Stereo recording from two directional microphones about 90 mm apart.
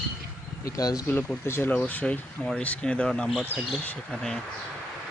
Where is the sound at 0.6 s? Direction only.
40° left (ahead or behind).